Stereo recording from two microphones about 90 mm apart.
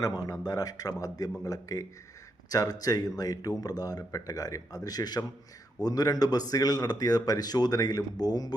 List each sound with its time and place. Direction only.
0.0 s a man's voice: 45° left (ahead or behind)